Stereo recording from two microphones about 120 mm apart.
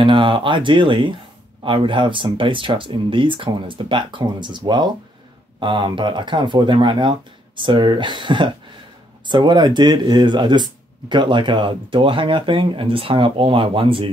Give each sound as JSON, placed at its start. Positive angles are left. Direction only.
{"t": 0.0, "sound": "speech", "side_deg": -45}